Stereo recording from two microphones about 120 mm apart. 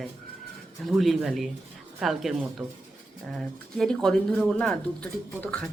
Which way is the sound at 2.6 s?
25° right (ahead or behind).